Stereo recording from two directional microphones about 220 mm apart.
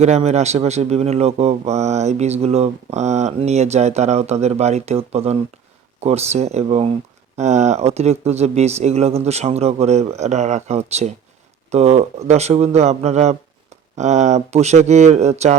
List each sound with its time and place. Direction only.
0.0 s a man's voice: 30° right (ahead or behind)